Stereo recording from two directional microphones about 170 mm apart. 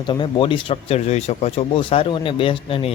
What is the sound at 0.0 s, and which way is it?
Speech, 30° left (ahead or behind).